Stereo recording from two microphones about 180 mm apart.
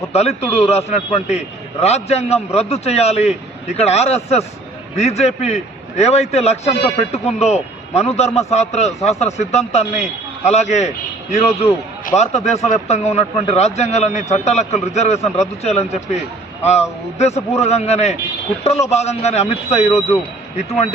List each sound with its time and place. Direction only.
0.1 s a man's voice: 35° left (ahead or behind)